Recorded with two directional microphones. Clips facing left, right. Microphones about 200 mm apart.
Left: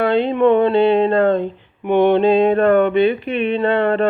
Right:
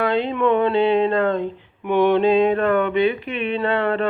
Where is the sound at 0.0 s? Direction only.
30° left (ahead or behind).